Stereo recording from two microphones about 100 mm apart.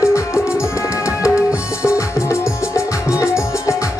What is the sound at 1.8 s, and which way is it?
Music, 30° left (ahead or behind).